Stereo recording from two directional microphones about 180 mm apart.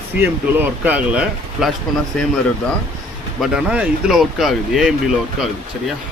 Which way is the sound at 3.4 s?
5° right (ahead or behind).